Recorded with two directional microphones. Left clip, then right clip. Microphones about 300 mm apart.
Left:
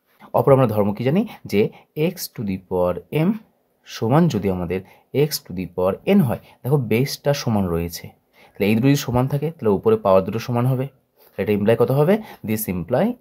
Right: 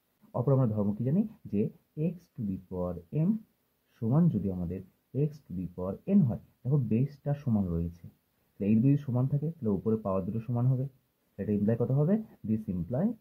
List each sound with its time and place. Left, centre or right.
0.3 s speech: left